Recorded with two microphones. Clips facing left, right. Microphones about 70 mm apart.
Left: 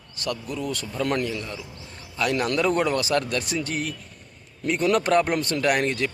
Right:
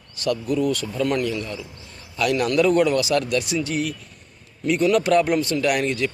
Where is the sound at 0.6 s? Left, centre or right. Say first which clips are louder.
Right 5 dB; left.